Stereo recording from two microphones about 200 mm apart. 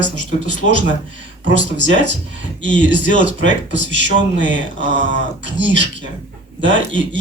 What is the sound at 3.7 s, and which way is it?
Speech, 65° right (ahead or behind).